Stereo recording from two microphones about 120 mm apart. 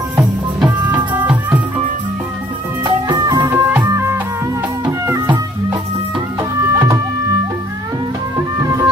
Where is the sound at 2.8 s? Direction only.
30° right (ahead or behind).